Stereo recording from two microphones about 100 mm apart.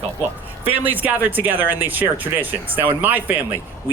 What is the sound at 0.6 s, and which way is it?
Speech, 20° right (ahead or behind).